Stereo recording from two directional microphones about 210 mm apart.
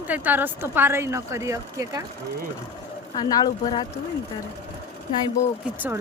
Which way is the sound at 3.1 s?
20° left (ahead or behind).